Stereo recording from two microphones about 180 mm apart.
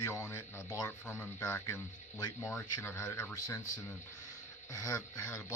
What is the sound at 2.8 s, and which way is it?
Speech, 10° left (ahead or behind).